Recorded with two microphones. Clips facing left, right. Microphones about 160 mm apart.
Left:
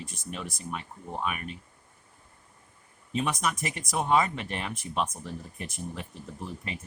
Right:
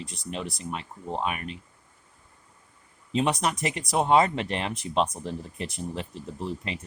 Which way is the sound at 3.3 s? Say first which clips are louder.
Right 3 dB; 65° right (ahead or behind).